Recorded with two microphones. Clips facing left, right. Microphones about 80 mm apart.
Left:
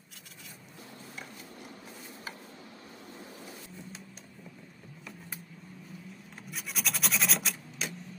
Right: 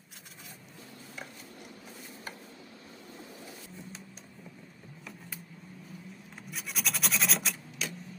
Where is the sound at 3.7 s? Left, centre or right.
Centre.